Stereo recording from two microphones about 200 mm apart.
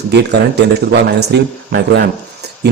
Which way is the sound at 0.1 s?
55° right (ahead or behind).